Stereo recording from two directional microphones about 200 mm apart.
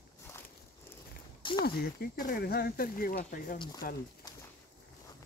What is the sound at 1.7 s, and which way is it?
Speech, 50° left (ahead or behind).